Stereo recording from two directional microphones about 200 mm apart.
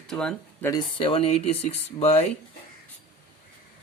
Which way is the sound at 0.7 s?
25° left (ahead or behind).